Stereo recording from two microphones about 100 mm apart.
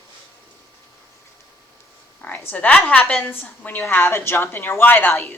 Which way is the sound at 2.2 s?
15° left (ahead or behind).